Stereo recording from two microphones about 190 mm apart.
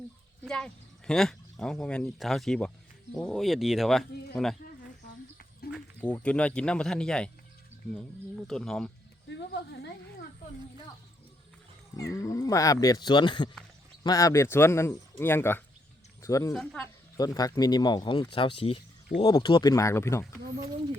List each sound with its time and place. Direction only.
0.4 s speech: 5° left (ahead or behind)
5.7 s speech: 10° left (ahead or behind)
9.3 s speech: 60° left (ahead or behind)
11.9 s a man's voice: 15° left (ahead or behind)